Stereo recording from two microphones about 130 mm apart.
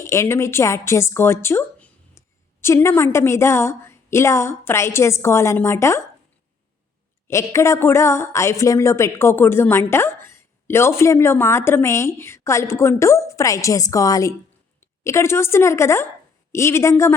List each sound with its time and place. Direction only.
0.0 s speech: 20° left (ahead or behind)
7.3 s a woman's voice: 20° left (ahead or behind)